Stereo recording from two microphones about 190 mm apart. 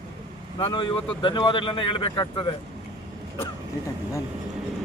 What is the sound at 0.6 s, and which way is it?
Speech, 25° left (ahead or behind).